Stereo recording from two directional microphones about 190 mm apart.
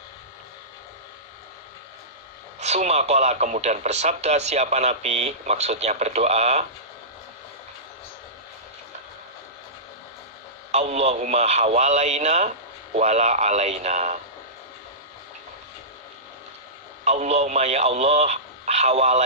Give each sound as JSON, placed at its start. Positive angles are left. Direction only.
{"t": 2.6, "sound": "speech", "side_deg": -35}
{"t": 10.7, "sound": "speech", "side_deg": -35}
{"t": 17.0, "sound": "speech", "side_deg": -35}